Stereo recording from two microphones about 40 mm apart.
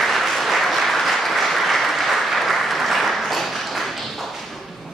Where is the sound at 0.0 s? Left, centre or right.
Centre.